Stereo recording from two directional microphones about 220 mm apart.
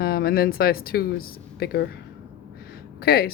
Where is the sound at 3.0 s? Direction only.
45° left (ahead or behind).